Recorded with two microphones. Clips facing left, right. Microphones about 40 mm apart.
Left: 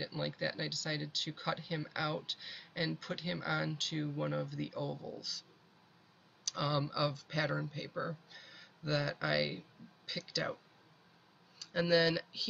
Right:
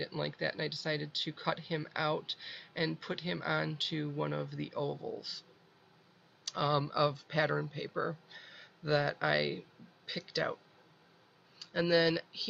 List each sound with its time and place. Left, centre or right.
0.0 s speech: centre
6.4 s speech: centre
11.6 s speech: centre